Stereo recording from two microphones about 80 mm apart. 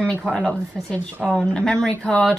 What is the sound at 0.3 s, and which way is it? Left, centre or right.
A woman's voice, centre.